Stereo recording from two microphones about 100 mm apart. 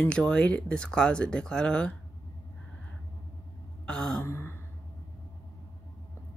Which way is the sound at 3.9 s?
10° left (ahead or behind).